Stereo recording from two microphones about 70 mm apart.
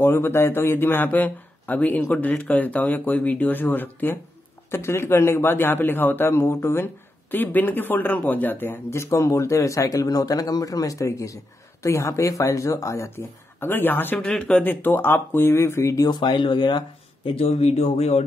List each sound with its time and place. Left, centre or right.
0.0 s a man's voice: left
13.1 s speech: left
14.1 s speech: centre
14.6 s a man's voice: left
16.1 s speech: left